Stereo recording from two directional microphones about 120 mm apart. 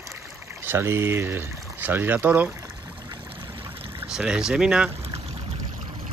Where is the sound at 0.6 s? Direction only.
20° right (ahead or behind).